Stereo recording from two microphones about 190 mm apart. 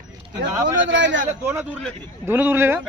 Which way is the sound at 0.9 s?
70° right (ahead or behind).